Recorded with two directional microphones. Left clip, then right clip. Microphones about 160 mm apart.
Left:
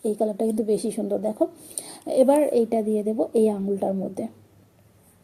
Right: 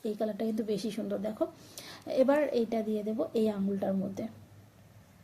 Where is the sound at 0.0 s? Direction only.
25° left (ahead or behind).